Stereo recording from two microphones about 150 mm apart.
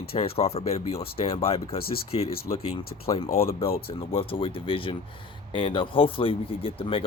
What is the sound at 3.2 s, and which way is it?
Speech, 40° left (ahead or behind).